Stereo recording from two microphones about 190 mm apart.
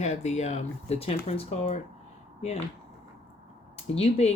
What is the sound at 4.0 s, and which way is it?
Speech, 35° left (ahead or behind).